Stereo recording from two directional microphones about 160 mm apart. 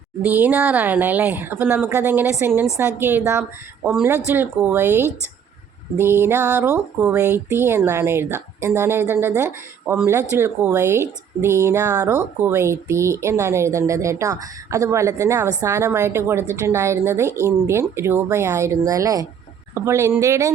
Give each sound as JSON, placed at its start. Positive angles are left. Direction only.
{"t": 0.2, "sound": "speech", "side_deg": -10}